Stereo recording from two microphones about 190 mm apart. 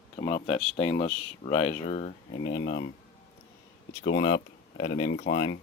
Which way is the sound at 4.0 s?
50° left (ahead or behind).